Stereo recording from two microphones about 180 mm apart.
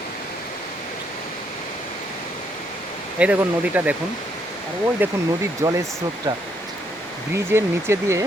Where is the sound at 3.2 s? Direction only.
5° right (ahead or behind).